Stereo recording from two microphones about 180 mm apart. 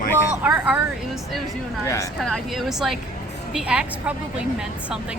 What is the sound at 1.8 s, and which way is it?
Speech, 15° left (ahead or behind).